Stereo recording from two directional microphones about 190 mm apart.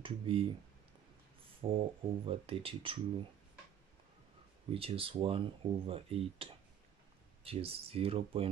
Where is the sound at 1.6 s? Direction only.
25° right (ahead or behind).